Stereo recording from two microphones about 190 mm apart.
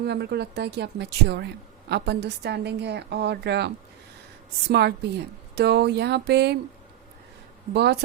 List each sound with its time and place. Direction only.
0.0 s speech: 60° right (ahead or behind)
4.7 s speech: 60° right (ahead or behind)
7.7 s speech: 60° right (ahead or behind)